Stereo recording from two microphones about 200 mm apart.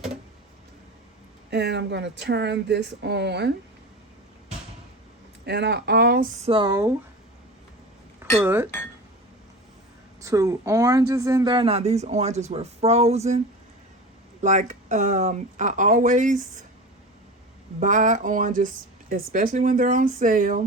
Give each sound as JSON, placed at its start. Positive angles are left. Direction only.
{"t": 1.5, "sound": "speech", "side_deg": -55}
{"t": 5.5, "sound": "speech", "side_deg": -55}
{"t": 6.4, "sound": "speech", "side_deg": -25}
{"t": 8.4, "sound": "speech", "side_deg": -10}
{"t": 10.2, "sound": "speech", "side_deg": -15}
{"t": 14.4, "sound": "speech", "side_deg": -35}
{"t": 17.7, "sound": "speech", "side_deg": -40}